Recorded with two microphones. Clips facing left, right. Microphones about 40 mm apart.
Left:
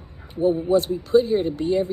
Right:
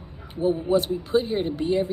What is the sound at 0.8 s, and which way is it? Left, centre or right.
Speech, right.